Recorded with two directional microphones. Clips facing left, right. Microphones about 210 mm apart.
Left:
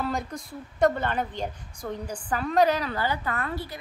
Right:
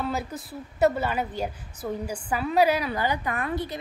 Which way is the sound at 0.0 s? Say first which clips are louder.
Even; 5° right (ahead or behind).